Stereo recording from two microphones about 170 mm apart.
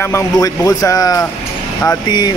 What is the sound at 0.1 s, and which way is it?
Speech, 20° left (ahead or behind).